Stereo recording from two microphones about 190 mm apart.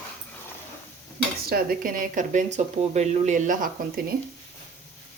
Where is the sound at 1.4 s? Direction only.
50° right (ahead or behind).